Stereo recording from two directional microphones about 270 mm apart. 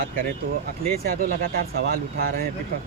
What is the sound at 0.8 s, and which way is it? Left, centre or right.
Speech, right.